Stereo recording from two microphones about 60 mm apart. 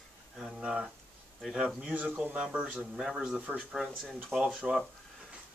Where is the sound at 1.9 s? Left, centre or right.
Centre.